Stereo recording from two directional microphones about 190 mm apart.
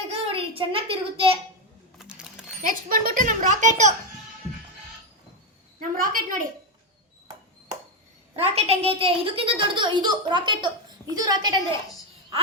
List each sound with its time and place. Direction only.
0.1 s a child's voice: 30° right (ahead or behind)
2.0 s a sound: 5° right (ahead or behind)
2.6 s a child's voice: 45° right (ahead or behind)
6.0 s a woman's voice: 45° right (ahead or behind)
8.4 s a woman's voice: 35° right (ahead or behind)